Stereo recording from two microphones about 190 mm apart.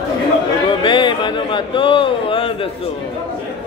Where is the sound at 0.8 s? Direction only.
25° left (ahead or behind).